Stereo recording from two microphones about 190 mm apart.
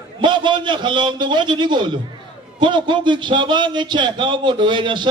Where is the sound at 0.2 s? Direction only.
25° right (ahead or behind).